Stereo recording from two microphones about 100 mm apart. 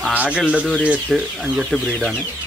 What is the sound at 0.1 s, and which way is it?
Bird, 15° right (ahead or behind).